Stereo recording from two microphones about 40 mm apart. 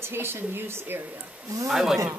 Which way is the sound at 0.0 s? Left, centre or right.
Right.